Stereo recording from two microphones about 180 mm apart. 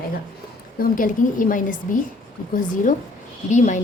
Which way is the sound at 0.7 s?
50° left (ahead or behind).